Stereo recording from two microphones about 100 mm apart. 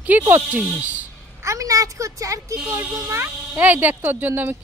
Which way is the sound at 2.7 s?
20° right (ahead or behind).